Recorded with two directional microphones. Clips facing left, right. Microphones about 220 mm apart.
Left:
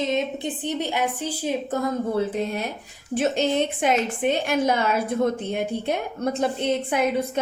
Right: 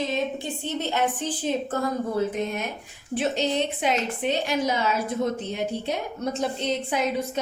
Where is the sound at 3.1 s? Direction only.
50° left (ahead or behind).